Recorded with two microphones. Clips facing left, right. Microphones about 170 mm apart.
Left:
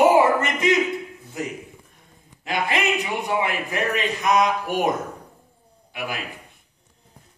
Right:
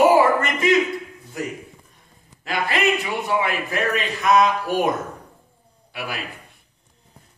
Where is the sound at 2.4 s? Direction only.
20° left (ahead or behind).